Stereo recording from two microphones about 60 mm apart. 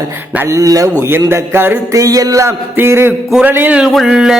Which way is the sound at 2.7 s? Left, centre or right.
Right.